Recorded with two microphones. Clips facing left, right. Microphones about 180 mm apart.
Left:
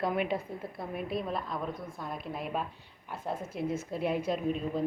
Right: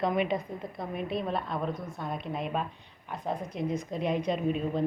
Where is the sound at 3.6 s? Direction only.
15° right (ahead or behind).